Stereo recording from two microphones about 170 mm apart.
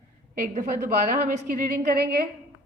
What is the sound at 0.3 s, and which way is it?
A woman's voice, 50° right (ahead or behind).